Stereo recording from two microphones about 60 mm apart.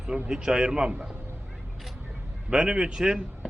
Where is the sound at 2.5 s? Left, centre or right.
Centre.